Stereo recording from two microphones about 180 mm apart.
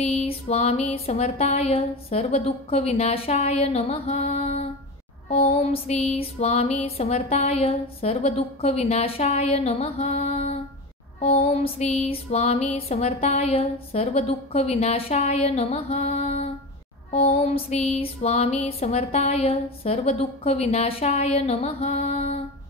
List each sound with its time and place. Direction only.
0.0 s music: 35° left (ahead or behind)